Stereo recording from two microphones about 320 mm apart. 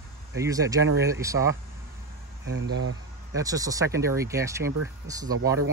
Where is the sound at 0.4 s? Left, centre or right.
Centre.